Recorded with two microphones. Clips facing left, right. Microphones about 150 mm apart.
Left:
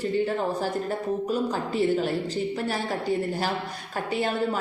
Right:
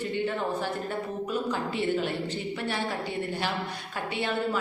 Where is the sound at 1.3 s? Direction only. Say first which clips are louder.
Left 3 dB; 40° left (ahead or behind).